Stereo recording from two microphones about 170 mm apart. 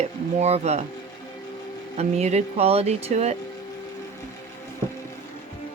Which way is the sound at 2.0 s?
40° right (ahead or behind).